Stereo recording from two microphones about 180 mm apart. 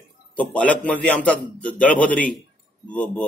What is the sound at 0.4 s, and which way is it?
A man's voice, 10° left (ahead or behind).